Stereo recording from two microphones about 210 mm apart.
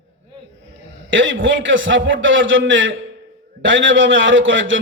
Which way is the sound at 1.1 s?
65° right (ahead or behind).